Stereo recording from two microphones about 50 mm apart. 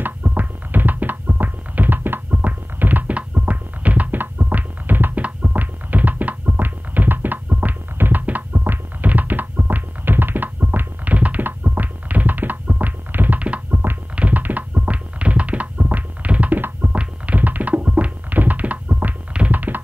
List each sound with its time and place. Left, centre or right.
0.0 s music: right
11.4 s tap: right
16.9 s music: right
19.5 s tap: right